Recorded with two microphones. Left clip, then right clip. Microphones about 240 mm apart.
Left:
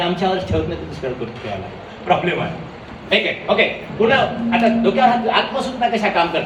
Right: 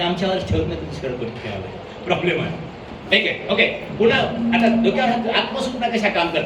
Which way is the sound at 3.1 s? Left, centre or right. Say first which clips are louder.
Left 1 dB; centre.